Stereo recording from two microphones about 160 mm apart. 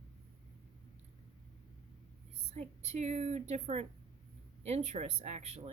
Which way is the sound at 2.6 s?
45° right (ahead or behind).